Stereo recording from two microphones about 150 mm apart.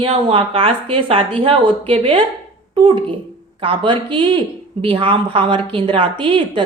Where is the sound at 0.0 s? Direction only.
40° right (ahead or behind).